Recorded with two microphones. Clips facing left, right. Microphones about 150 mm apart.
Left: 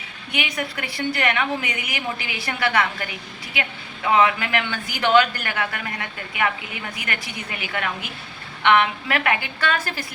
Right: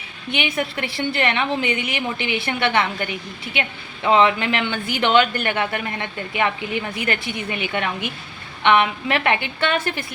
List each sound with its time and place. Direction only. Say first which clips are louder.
0.3 s a woman's voice: right 4 dB; 25° right (ahead or behind)